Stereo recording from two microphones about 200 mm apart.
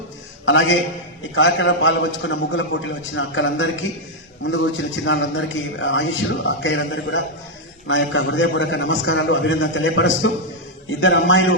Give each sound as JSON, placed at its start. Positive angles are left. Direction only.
{"t": 0.4, "sound": "a man's voice", "side_deg": 70}